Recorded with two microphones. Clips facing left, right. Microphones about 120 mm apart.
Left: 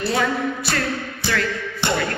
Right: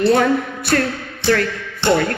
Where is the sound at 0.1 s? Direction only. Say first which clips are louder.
Right 6 dB; 55° right (ahead or behind).